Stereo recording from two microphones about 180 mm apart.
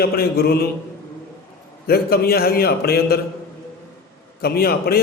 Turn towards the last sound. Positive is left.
turn(degrees=60)  # may be behind; listen again after turning